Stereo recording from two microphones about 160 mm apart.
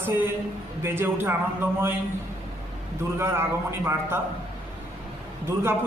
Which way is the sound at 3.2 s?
15° right (ahead or behind).